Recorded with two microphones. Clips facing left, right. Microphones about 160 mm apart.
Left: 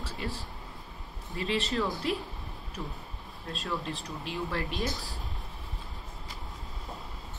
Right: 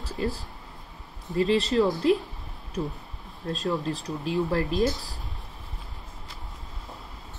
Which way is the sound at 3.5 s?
40° right (ahead or behind).